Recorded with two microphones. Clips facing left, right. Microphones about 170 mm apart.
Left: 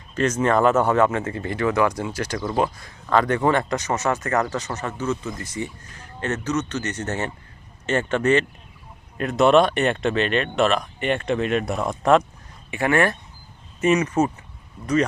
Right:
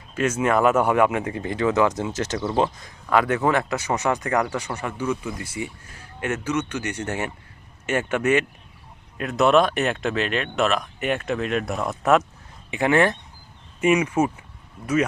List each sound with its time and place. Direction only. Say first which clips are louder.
0.1 s speech: left 1 dB; 10° right (ahead or behind)
3.1 s speech: left 1 dB; 5° right (ahead or behind)
12.7 s speech: right 1 dB; 20° right (ahead or behind)